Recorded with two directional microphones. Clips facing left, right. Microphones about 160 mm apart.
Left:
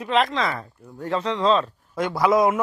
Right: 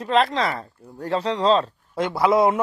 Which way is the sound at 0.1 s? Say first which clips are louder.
Right 2 dB; 35° right (ahead or behind).